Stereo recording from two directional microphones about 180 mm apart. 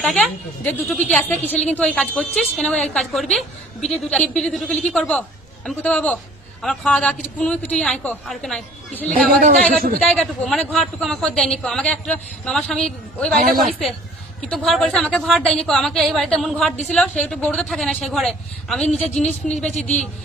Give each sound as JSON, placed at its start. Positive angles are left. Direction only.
{"t": 0.0, "sound": "a woman's voice", "side_deg": 5}
{"t": 9.4, "sound": "a man's voice", "side_deg": -50}
{"t": 10.1, "sound": "a woman's voice", "side_deg": 0}
{"t": 14.5, "sound": "a woman's voice", "side_deg": 5}